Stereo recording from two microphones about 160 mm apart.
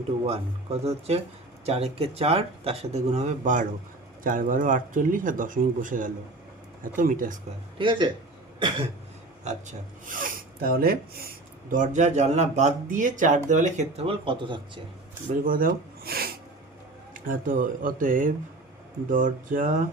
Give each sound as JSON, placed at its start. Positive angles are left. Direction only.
{"t": 0.3, "sound": "speech", "side_deg": -40}
{"t": 7.8, "sound": "speech", "side_deg": -30}
{"t": 8.5, "sound": "cough", "side_deg": -30}
{"t": 9.4, "sound": "speech", "side_deg": -50}
{"t": 11.7, "sound": "speech", "side_deg": -50}
{"t": 15.4, "sound": "speech", "side_deg": -60}
{"t": 17.2, "sound": "speech", "side_deg": -60}